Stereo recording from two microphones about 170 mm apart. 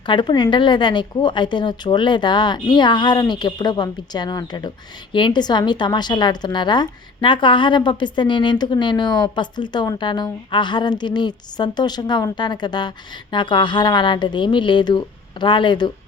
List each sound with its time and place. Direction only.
0.0 s a woman's voice: 25° left (ahead or behind)